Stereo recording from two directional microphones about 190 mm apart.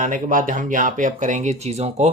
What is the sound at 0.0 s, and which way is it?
Speech, 45° right (ahead or behind).